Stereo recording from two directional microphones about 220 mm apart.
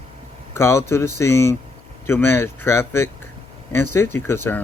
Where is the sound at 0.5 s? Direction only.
10° left (ahead or behind).